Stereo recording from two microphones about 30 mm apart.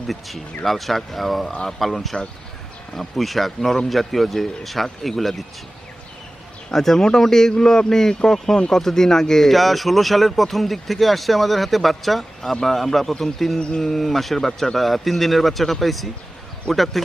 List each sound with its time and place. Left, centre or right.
0.0 s speech: centre
1.5 s speech: centre
1.8 s a man's voice: centre
6.7 s a man's voice: centre
9.5 s a man's voice: centre